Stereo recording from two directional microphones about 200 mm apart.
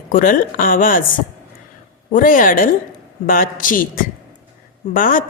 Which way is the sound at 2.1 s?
45° left (ahead or behind).